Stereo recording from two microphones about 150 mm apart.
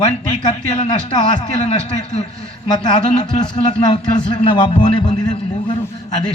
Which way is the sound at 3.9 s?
30° left (ahead or behind).